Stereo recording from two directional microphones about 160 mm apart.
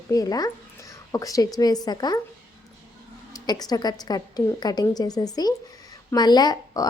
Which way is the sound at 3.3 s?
25° left (ahead or behind).